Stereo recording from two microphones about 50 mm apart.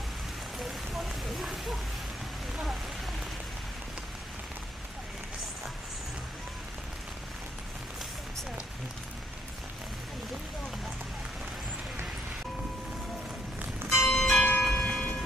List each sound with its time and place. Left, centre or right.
0.6 s a sound: centre
13.8 s church bell: centre
14.3 s church bell: left
14.7 s train: left